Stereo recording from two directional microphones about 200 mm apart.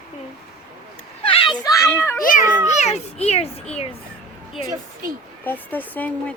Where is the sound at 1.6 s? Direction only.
15° left (ahead or behind).